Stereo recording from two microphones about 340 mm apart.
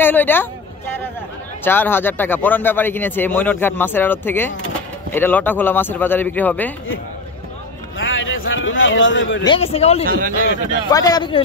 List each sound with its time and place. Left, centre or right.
0.0 s speech: centre
1.6 s speech: centre
8.0 s a sound: left
9.4 s speech: centre
10.0 s speech: right
10.9 s speech: centre